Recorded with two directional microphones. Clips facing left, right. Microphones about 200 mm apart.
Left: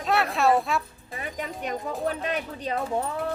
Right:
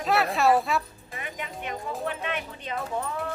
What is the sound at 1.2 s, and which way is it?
Music, 40° left (ahead or behind).